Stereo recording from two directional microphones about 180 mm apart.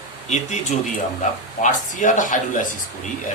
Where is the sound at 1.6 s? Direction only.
45° left (ahead or behind).